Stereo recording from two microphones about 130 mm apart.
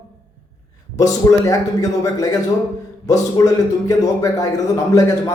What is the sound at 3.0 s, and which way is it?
A man's voice, 25° left (ahead or behind).